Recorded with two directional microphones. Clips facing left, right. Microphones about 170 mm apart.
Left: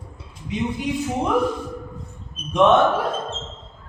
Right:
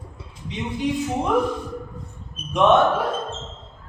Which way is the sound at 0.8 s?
Centre (ahead or behind).